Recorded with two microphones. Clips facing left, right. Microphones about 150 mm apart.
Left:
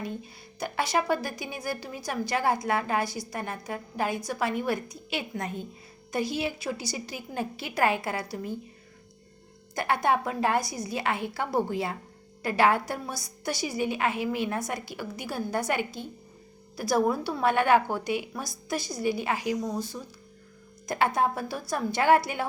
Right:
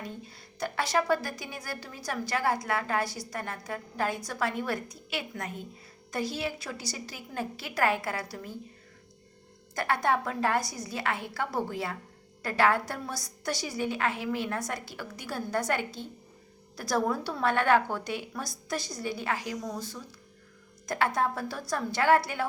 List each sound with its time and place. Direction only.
0.6 s a woman's voice: 15° left (ahead or behind)
9.7 s a woman's voice: 15° left (ahead or behind)